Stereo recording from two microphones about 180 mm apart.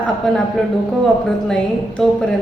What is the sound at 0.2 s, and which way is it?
Speech, 5° left (ahead or behind).